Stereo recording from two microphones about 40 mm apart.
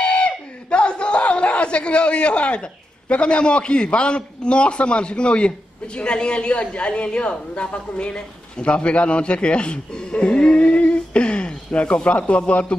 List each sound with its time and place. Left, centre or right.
0.0 s a man's voice: left